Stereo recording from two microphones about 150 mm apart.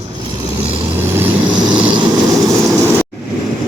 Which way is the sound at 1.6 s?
30° right (ahead or behind).